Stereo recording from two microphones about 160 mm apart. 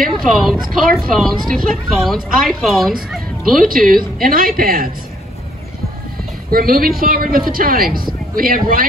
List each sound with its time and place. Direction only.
0.2 s speech: centre (ahead or behind)
3.6 s speech: 60° right (ahead or behind)
6.5 s speech: 65° right (ahead or behind)